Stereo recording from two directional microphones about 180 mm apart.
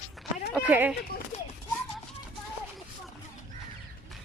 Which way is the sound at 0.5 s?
10° right (ahead or behind).